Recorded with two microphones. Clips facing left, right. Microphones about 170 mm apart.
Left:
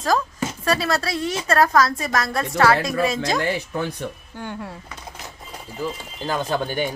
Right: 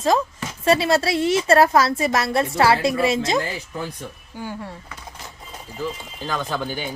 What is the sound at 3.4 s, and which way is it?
Speech, 70° left (ahead or behind).